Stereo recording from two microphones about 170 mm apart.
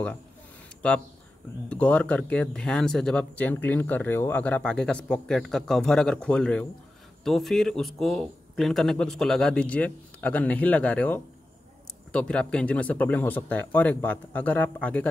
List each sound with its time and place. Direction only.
0.8 s a man's voice: 5° left (ahead or behind)